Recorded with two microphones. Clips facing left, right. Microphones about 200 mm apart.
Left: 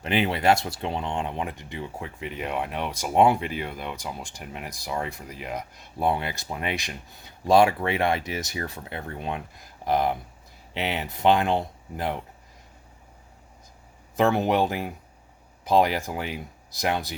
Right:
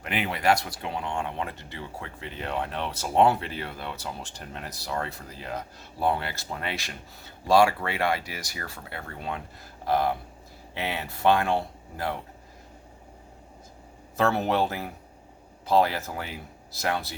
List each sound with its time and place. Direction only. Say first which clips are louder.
0.0 s speech: left 4 dB; 25° left (ahead or behind)
14.2 s speech: left 3 dB; 15° left (ahead or behind)